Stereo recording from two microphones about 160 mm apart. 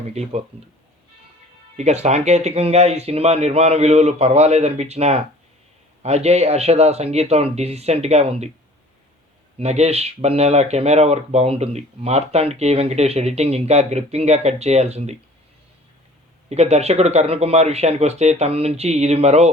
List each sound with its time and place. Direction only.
0.0 s speech: 45° right (ahead or behind)
1.7 s speech: 45° right (ahead or behind)
9.6 s speech: 40° right (ahead or behind)
16.5 s speech: 45° right (ahead or behind)